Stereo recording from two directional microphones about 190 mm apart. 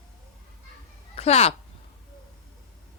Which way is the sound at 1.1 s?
35° left (ahead or behind).